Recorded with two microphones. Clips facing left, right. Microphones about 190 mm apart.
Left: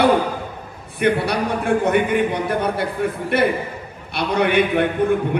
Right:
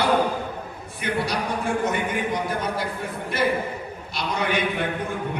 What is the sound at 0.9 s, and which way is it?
A man's voice, 60° left (ahead or behind).